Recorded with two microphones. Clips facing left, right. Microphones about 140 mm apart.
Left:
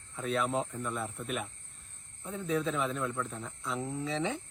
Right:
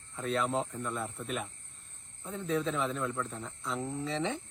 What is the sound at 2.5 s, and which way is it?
A man's voice, centre (ahead or behind).